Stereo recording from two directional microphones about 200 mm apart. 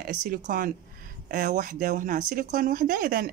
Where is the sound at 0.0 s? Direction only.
45° right (ahead or behind).